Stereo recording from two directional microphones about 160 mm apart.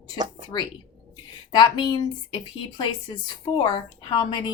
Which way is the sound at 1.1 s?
25° left (ahead or behind).